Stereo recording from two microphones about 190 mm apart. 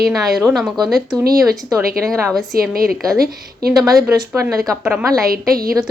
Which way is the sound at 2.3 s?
Centre (ahead or behind).